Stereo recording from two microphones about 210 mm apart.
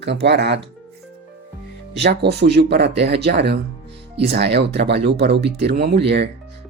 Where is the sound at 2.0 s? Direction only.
50° right (ahead or behind).